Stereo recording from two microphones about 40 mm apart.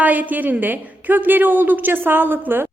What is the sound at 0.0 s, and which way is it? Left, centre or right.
Speech, right.